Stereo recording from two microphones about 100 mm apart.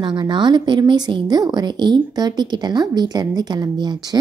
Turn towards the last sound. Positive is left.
turn(degrees=-45)  # may be behind; listen again after turning